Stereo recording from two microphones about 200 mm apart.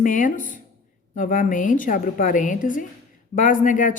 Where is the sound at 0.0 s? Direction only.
40° left (ahead or behind).